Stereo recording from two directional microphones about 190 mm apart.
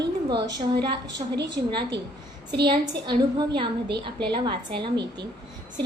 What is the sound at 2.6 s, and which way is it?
A woman's voice, 25° right (ahead or behind).